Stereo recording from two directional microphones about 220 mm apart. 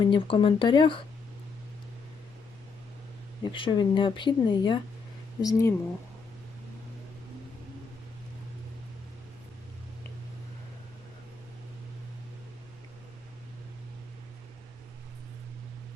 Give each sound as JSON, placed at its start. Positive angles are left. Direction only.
{"t": 0.0, "sound": "speech", "side_deg": 20}
{"t": 3.4, "sound": "speech", "side_deg": 20}